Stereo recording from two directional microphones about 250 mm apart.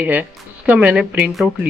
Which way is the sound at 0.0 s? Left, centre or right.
Centre.